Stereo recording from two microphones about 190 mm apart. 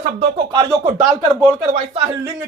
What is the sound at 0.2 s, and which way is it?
Speech, 20° right (ahead or behind).